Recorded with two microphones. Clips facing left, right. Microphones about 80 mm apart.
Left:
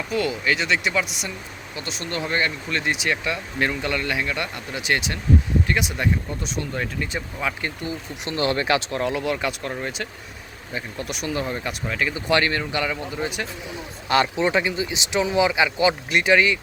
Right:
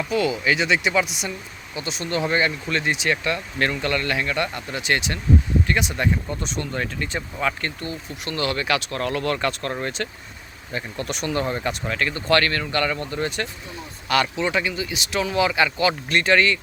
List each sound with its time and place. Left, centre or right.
0.1 s speech: centre
14.1 s speech: left